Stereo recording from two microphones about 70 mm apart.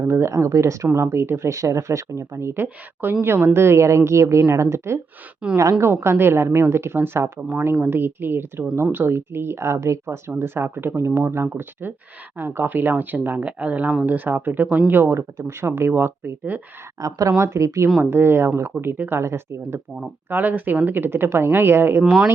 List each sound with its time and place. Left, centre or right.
0.0 s speech: right
5.4 s a woman's voice: centre
5.8 s speech: right
17.2 s speech: right
20.3 s speech: right
22.0 s speech: centre